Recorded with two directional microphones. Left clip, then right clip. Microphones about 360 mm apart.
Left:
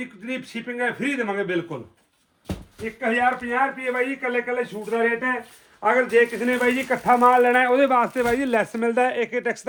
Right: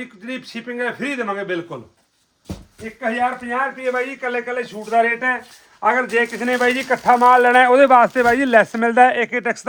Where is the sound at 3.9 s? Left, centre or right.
Centre.